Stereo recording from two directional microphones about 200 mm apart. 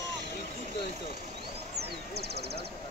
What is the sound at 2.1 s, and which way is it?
Speech, 55° right (ahead or behind).